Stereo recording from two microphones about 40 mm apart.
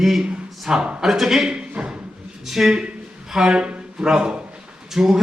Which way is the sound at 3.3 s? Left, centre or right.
Right.